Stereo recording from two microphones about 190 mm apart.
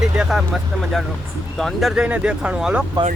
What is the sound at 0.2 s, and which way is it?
Speech, centre (ahead or behind).